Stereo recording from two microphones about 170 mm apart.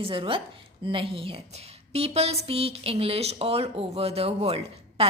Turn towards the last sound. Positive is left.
turn(degrees=-35)  # may be behind; listen again after turning